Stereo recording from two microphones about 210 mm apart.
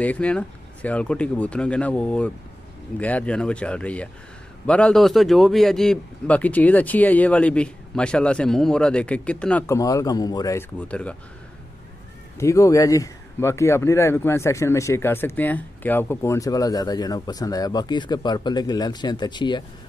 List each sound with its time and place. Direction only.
0.0 s a man's voice: 5° left (ahead or behind)
12.4 s speech: 15° left (ahead or behind)